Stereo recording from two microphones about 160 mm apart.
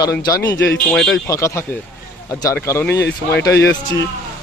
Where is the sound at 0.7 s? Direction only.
5° left (ahead or behind).